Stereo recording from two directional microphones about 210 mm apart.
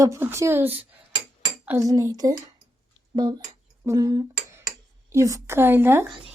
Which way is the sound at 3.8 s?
15° right (ahead or behind).